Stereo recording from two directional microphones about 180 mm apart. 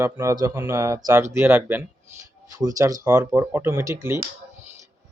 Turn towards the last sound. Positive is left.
turn(degrees=-15)  # may be behind; listen again after turning